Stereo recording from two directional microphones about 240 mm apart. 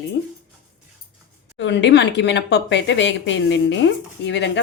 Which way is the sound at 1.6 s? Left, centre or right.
Left.